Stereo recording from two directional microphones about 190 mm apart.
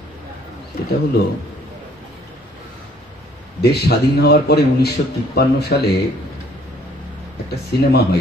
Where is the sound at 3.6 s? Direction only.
60° left (ahead or behind).